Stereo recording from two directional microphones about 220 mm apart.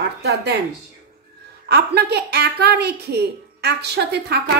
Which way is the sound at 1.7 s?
50° right (ahead or behind).